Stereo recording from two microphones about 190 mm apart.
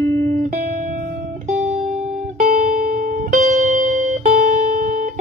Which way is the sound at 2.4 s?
45° right (ahead or behind).